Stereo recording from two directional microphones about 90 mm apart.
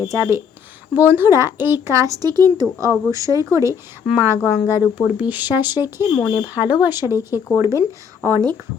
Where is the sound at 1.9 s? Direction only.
35° right (ahead or behind).